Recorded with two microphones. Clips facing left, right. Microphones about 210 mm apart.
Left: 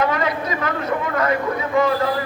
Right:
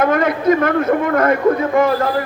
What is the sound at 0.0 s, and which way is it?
A man's voice, 50° right (ahead or behind).